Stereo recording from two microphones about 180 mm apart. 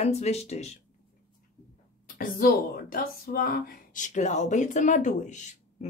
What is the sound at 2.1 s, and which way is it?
Speech, 50° left (ahead or behind).